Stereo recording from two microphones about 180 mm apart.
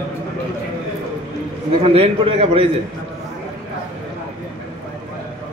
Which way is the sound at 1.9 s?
30° right (ahead or behind).